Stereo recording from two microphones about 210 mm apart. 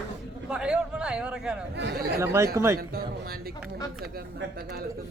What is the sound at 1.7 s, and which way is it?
Speech, 50° right (ahead or behind).